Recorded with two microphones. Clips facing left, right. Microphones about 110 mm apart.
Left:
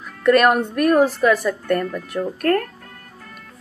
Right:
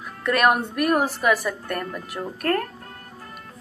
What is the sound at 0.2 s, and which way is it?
Speech, 5° right (ahead or behind).